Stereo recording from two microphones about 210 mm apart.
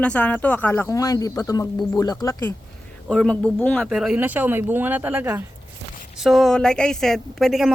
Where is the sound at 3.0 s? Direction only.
5° left (ahead or behind).